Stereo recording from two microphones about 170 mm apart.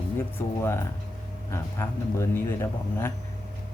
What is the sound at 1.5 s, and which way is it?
Mantra, 15° left (ahead or behind).